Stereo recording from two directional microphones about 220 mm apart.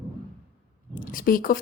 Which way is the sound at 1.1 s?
40° left (ahead or behind).